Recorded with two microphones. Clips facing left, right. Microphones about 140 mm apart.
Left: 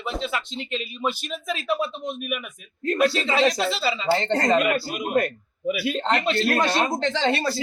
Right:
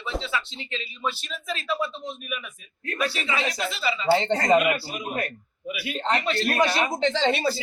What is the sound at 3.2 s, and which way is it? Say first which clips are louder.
Speech: left 7 dB; 80° left.